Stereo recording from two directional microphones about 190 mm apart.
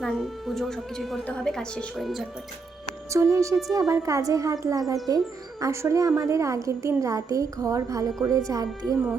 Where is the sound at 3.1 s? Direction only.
15° right (ahead or behind).